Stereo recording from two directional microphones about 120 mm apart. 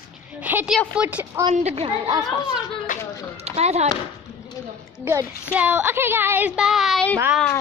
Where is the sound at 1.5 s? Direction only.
60° right (ahead or behind).